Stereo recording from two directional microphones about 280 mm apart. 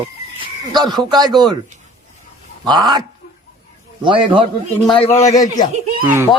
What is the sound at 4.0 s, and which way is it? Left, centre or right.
Speech, centre.